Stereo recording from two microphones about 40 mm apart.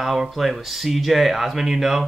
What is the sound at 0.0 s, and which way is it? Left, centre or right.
Speech, centre.